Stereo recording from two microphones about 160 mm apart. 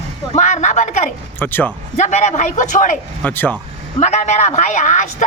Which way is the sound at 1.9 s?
45° left (ahead or behind).